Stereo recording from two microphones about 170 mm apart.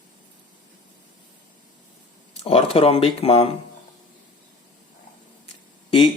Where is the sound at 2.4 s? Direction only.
35° left (ahead or behind).